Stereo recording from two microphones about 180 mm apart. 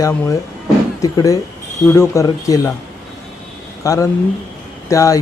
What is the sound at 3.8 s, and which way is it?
Speech, 15° left (ahead or behind).